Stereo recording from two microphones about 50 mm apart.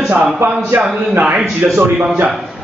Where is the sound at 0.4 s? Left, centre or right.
Right.